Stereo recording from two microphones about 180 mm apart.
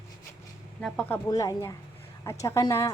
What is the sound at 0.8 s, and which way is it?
Speech, 5° left (ahead or behind).